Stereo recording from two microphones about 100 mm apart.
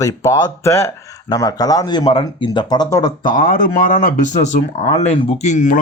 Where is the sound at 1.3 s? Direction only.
40° left (ahead or behind).